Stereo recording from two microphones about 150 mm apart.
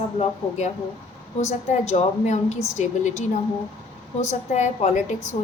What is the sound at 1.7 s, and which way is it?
Speech, 50° left (ahead or behind).